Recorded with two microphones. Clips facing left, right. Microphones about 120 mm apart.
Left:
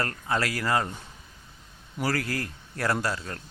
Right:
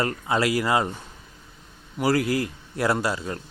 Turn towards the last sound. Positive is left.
turn(degrees=-15)  # may be behind; listen again after turning